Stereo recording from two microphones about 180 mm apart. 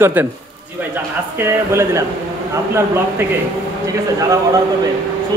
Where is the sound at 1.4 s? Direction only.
15° right (ahead or behind).